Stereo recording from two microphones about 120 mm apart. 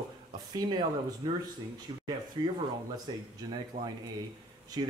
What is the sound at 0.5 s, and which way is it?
Speech, 35° right (ahead or behind).